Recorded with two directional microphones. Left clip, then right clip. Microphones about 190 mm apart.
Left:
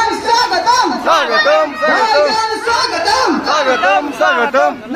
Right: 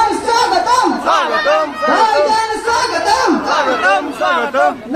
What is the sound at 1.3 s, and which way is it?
Chatter, 30° left (ahead or behind).